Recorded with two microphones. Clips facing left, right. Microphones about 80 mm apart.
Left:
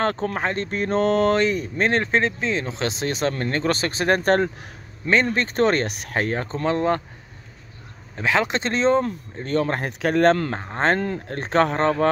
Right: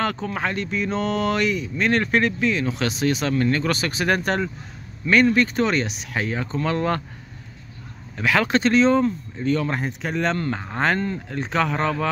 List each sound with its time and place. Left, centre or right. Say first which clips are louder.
0.0 s speech: left 2 dB; left
0.7 s speech: left 3 dB; left
5.1 s speech: right 3 dB; left
6.6 s speech: left 2 dB; left
8.2 s speech: right 2 dB; left
9.0 s speech: right 6 dB; left
9.8 s speech: left 7 dB; left
10.6 s speech: left 1 dB; left
11.2 s speech: left 5 dB; left